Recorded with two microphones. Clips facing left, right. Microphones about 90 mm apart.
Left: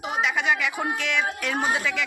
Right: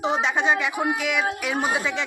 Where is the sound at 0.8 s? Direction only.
10° right (ahead or behind).